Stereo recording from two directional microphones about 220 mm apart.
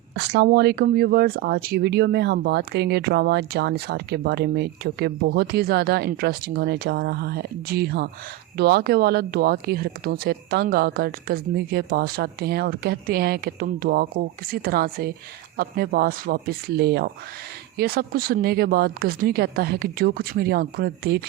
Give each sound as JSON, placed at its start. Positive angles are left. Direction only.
{"t": 0.1, "sound": "speech", "side_deg": -50}